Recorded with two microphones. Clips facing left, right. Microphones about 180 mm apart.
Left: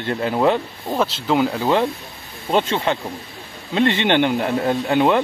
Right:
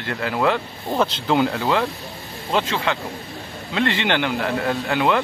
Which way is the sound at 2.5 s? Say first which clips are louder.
Left 3 dB; 25° left (ahead or behind).